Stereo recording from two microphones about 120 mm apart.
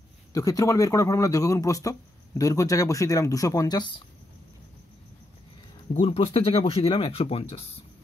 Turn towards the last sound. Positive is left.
turn(degrees=55)  # may be behind; listen again after turning